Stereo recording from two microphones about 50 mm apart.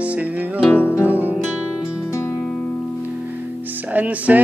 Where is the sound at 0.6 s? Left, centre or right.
Left.